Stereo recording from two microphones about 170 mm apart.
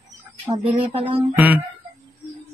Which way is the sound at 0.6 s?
35° right (ahead or behind).